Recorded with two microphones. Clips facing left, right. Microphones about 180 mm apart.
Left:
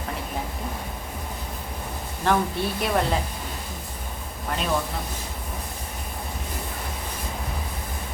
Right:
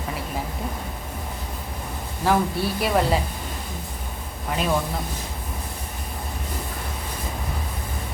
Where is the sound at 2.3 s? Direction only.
5° right (ahead or behind).